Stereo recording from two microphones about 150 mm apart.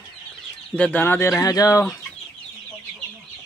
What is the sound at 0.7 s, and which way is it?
Speech, 10° left (ahead or behind).